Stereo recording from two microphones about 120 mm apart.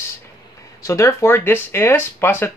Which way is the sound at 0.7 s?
25° left (ahead or behind).